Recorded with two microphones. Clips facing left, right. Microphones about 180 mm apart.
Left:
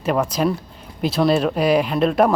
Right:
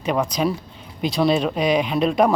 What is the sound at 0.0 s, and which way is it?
Speech, 5° left (ahead or behind).